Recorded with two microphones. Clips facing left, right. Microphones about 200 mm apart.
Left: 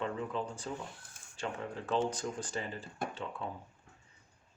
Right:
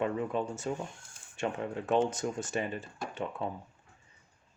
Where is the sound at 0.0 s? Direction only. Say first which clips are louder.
Right 5 dB; 20° right (ahead or behind).